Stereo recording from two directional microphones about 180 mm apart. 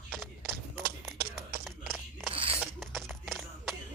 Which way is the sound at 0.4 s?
60° right (ahead or behind).